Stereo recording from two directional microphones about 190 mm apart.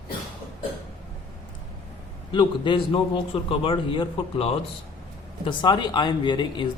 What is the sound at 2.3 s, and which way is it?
Speech, 25° left (ahead or behind).